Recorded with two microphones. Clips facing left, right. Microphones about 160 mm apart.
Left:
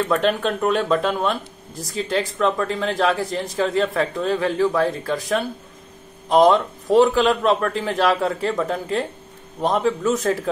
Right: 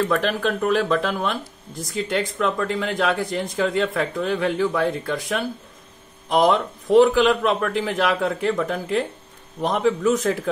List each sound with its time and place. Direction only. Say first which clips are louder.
0.2 s speech: left 2 dB; centre (ahead or behind)